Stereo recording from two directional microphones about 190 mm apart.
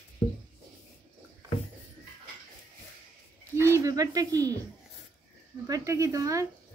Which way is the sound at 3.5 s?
15° right (ahead or behind).